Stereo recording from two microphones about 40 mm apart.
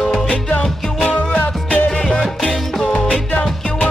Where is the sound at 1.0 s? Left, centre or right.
Left.